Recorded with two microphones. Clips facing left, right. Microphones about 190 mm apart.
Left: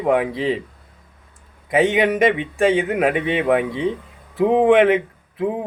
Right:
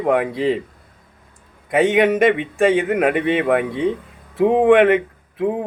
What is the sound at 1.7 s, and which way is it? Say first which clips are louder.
A man's voice: right 2 dB; centre (ahead or behind).